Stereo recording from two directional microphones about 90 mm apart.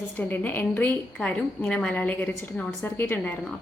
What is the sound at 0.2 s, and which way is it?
A woman's voice, 20° left (ahead or behind).